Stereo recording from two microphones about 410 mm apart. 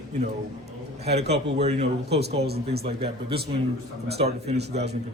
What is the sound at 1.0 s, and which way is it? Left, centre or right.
Speech, right.